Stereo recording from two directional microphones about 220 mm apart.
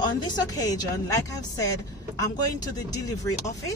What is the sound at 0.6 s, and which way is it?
Speech, 15° left (ahead or behind).